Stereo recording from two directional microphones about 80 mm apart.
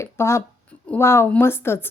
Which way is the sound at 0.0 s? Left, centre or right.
Left.